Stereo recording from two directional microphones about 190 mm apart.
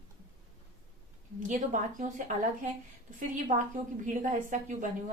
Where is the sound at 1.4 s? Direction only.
40° right (ahead or behind).